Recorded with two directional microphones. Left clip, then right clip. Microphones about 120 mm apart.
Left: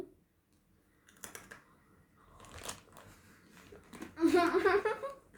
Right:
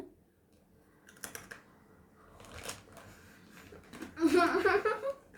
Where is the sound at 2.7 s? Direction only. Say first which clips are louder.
Right 1 dB; 25° left (ahead or behind).